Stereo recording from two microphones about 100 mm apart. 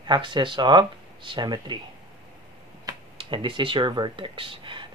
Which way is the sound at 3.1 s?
55° right (ahead or behind).